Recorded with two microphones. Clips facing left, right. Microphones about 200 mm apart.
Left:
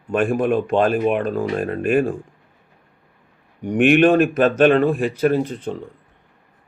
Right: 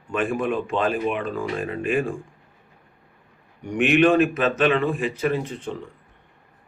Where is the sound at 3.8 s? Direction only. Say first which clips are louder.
Left 3 dB; 50° left (ahead or behind).